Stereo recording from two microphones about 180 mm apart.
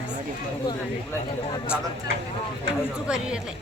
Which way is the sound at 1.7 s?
5° right (ahead or behind).